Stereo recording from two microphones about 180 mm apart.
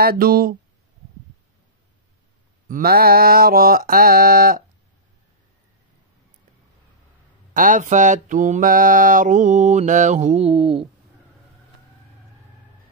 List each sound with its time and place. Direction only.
0.0 s mantra: 55° right (ahead or behind)
2.7 s mantra: 55° right (ahead or behind)
7.5 s mantra: 45° right (ahead or behind); by 10.9 s 30° right (ahead or behind)